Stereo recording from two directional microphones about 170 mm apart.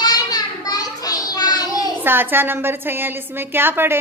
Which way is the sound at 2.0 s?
10° right (ahead or behind).